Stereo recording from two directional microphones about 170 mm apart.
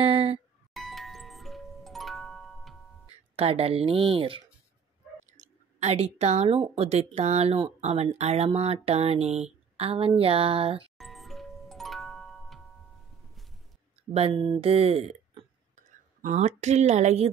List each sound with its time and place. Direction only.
0.0 s music: 35° right (ahead or behind)
0.7 s music: centre (ahead or behind)
3.3 s speech: 35° right (ahead or behind)
5.4 s a woman's voice: 40° right (ahead or behind)
11.0 s music: centre (ahead or behind)
14.3 s a sound: 20° right (ahead or behind)
14.6 s speech: 35° right (ahead or behind)
15.7 s speech: 50° right (ahead or behind)